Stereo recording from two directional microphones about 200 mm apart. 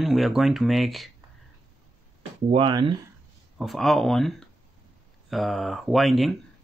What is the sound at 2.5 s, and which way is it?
Speech, 25° right (ahead or behind).